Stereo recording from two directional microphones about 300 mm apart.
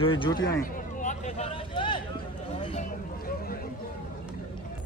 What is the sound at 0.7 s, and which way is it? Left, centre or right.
Vehicle, left.